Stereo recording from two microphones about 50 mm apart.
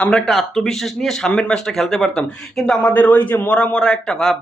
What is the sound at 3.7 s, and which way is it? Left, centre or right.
Speech, centre.